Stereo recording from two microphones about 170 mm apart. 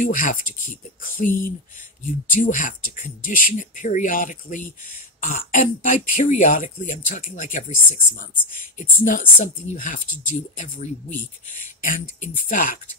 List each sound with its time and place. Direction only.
0.0 s speech: 50° left (ahead or behind)